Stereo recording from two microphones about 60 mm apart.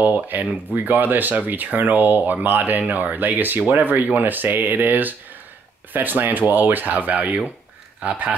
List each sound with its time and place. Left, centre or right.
0.0 s speech: right